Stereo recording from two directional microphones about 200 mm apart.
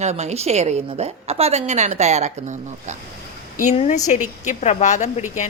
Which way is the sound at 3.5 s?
35° left (ahead or behind).